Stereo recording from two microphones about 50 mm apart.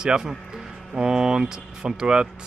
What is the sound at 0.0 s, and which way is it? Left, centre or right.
Speech, centre.